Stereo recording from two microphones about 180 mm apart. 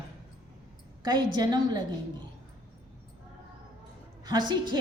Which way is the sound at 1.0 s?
25° right (ahead or behind).